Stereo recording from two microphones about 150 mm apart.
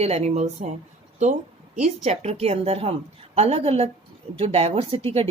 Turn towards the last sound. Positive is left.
turn(degrees=-40)  # may be behind; listen again after turning